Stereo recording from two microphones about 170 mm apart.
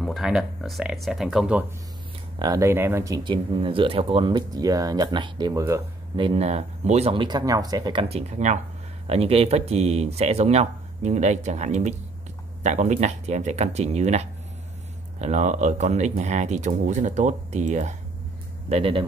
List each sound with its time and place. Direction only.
0.0 s speech: centre (ahead or behind)
2.3 s speech: 20° right (ahead or behind)
8.3 s speech: 40° right (ahead or behind)
18.7 s speech: 30° right (ahead or behind)